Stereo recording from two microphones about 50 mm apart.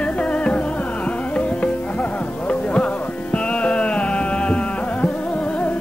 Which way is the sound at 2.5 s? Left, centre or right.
Left.